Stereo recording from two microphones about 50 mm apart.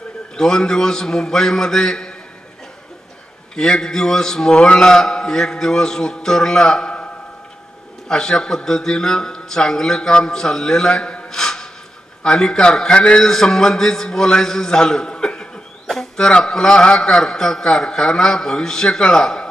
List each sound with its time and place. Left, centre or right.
0.4 s a man's voice: centre
3.5 s a man's voice: centre
8.1 s a man's voice: centre
13.2 s a man's voice: centre